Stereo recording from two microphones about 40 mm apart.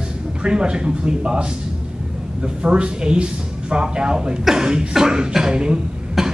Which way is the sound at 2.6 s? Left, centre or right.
Right.